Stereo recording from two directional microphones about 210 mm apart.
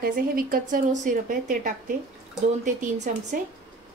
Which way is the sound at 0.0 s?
45° right (ahead or behind).